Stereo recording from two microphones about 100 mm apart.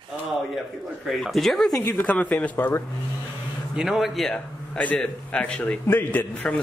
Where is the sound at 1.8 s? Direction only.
15° left (ahead or behind).